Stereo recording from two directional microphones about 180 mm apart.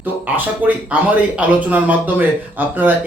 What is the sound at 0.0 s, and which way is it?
Speech, 10° right (ahead or behind).